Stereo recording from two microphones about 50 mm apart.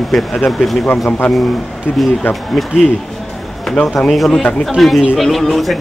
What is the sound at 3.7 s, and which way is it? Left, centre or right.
Speech, centre.